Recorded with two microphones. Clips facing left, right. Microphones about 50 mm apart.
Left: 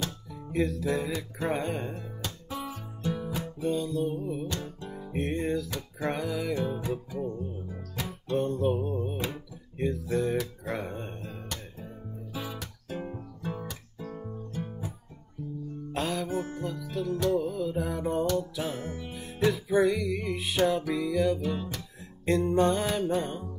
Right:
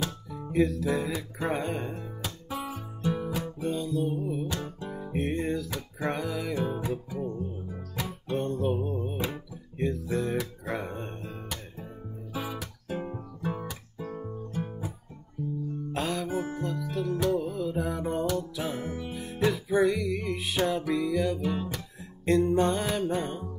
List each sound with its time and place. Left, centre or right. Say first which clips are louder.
0.0 s music: right 2 dB; centre
2.6 s music: right 2 dB; centre
3.5 s music: left 3 dB; centre
13.0 s guitar: right 3 dB; centre
15.9 s music: left 1 dB; centre
21.4 s music: right 1 dB; centre